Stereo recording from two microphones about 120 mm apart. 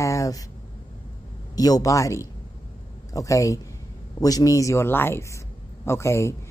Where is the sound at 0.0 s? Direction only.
25° left (ahead or behind).